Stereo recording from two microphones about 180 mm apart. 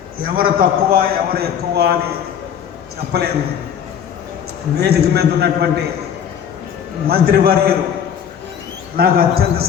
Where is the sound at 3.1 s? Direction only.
60° right (ahead or behind).